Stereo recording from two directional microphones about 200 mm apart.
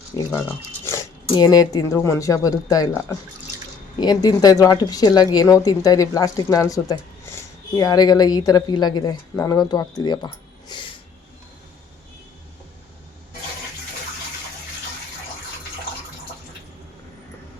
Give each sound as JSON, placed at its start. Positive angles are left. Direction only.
{"t": 0.3, "sound": "speech", "side_deg": 15}